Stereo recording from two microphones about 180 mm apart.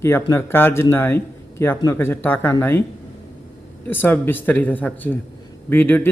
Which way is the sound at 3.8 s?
10° left (ahead or behind).